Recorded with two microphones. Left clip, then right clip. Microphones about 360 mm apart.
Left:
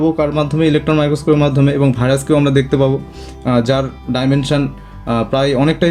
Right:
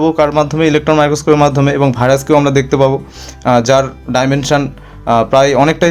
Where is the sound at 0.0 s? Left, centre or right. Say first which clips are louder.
Right 4 dB; centre.